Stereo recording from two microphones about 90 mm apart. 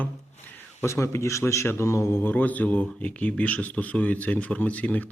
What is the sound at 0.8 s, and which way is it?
Speech, 30° left (ahead or behind).